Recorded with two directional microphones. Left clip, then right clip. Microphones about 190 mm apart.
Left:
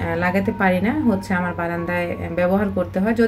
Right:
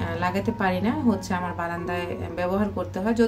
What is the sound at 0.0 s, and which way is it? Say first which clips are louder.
A woman's voice: left 5 dB; 10° left (ahead or behind).